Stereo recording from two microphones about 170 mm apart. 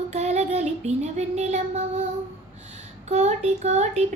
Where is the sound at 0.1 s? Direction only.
40° right (ahead or behind).